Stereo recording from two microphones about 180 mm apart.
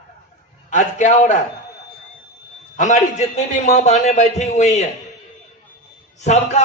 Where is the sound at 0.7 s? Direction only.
45° left (ahead or behind).